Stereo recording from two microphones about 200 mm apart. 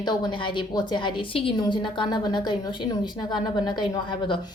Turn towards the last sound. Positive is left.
turn(degrees=25)  # may be behind; listen again after turning